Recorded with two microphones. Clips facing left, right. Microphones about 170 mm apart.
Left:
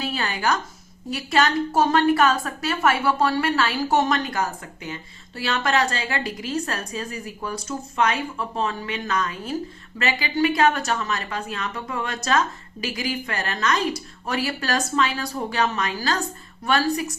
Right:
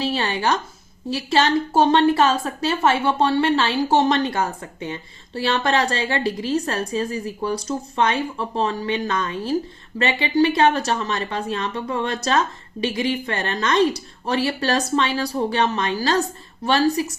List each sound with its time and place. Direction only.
0.0 s a woman's voice: 25° right (ahead or behind)